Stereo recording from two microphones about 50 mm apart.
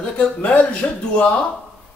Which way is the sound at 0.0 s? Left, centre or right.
Left.